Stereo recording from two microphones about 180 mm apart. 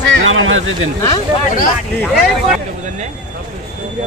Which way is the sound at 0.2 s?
90° right.